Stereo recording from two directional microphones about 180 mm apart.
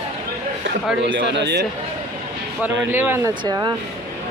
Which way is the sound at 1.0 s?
75° right (ahead or behind).